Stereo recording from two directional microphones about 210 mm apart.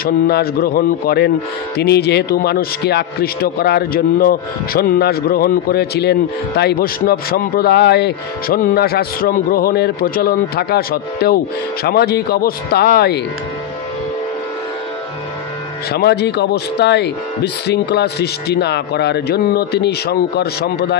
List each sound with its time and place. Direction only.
0.0 s a man's voice: 45° left (ahead or behind)
15.9 s a man's voice: 50° left (ahead or behind)